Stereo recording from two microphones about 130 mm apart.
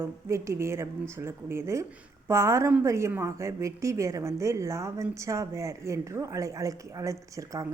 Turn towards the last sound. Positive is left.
turn(degrees=-25)  # may be behind; listen again after turning